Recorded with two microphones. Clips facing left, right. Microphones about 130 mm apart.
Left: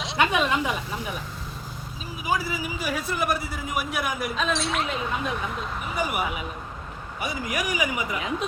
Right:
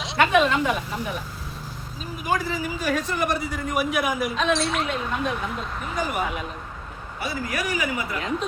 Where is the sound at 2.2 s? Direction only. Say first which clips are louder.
Right 2 dB; 10° left (ahead or behind).